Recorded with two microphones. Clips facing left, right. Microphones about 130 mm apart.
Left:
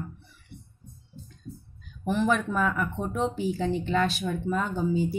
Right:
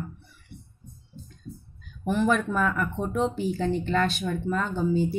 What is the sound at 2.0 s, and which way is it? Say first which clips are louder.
Speech: right 1 dB; centre (ahead or behind).